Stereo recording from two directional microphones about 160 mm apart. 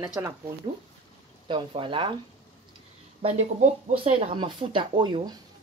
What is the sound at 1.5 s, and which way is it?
Speech, 30° right (ahead or behind).